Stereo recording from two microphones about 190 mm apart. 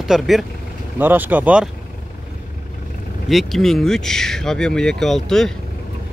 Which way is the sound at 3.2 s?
Centre (ahead or behind).